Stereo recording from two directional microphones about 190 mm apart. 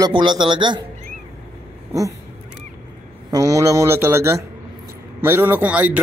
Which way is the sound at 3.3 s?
15° right (ahead or behind).